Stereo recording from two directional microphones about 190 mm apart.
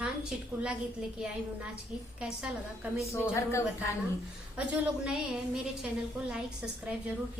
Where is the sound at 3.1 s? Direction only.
15° left (ahead or behind).